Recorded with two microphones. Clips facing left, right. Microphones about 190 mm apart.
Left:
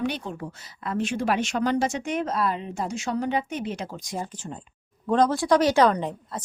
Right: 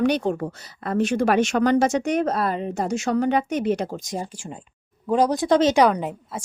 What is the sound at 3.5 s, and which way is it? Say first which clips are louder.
Speech: right 8 dB; 60° right (ahead or behind).